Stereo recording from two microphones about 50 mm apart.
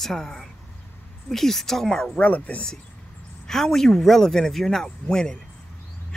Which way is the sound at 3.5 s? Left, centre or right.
Centre.